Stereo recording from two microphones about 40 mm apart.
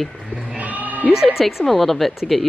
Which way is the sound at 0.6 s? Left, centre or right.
Right.